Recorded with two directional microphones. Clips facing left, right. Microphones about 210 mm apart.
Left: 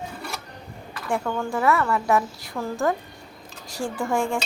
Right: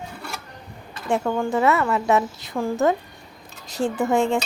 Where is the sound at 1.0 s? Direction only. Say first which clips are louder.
Right 4 dB; 20° right (ahead or behind).